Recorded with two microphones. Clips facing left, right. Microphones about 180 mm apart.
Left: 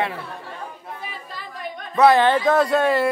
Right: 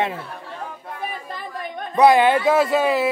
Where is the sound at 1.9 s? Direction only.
15° right (ahead or behind).